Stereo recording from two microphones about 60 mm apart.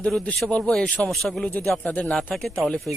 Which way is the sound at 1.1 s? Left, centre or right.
Centre.